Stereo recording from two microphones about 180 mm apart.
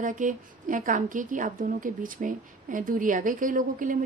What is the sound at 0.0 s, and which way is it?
A woman's voice, 45° right (ahead or behind).